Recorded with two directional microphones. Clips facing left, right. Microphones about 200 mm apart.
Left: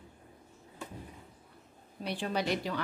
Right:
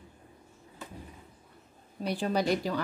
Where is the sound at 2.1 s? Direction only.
40° right (ahead or behind).